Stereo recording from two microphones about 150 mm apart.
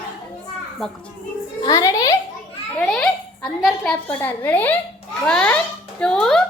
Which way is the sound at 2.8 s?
5° left (ahead or behind).